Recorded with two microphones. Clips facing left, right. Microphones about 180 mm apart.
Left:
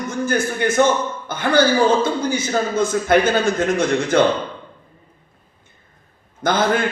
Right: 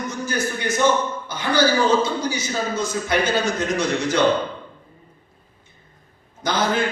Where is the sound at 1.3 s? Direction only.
55° left (ahead or behind).